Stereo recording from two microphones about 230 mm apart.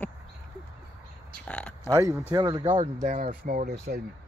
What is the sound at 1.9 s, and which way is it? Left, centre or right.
Speech, centre.